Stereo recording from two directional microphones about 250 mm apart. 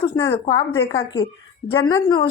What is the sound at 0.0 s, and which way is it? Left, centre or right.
A woman's voice, left.